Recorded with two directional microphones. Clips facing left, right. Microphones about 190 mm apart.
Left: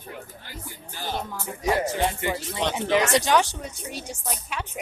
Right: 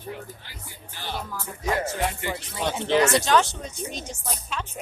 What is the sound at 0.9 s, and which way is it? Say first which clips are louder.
Music: left 3 dB; 45° left (ahead or behind).